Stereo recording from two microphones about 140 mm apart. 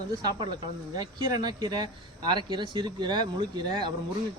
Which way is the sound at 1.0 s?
30° right (ahead or behind).